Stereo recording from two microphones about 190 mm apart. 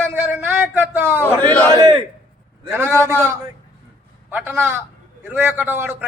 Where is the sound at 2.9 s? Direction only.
15° left (ahead or behind).